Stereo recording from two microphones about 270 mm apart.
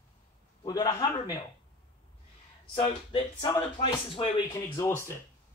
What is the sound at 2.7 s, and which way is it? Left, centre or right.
Speech, centre.